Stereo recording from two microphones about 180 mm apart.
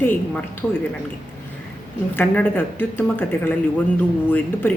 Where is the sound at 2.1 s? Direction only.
10° left (ahead or behind).